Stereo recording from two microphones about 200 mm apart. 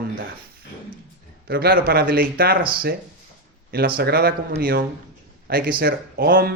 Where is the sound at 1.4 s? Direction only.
50° right (ahead or behind).